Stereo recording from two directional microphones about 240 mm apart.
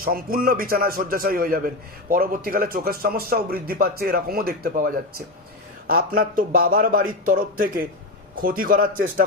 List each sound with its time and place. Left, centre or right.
0.0 s a man's voice: right